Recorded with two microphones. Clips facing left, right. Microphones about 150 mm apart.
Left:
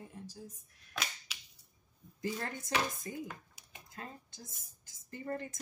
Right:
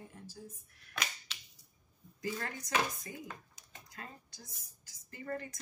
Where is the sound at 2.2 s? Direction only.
25° left (ahead or behind).